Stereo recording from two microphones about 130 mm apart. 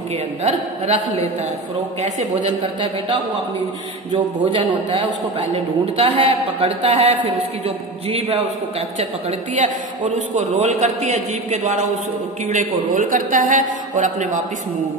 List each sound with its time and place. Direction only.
0.4 s a man's voice: 50° right (ahead or behind)
10.1 s speech: 65° right (ahead or behind)
12.4 s a man's voice: 70° right (ahead or behind)